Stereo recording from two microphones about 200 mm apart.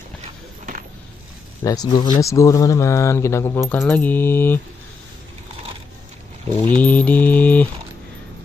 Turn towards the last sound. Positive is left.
turn(degrees=10)  # may be behind; listen again after turning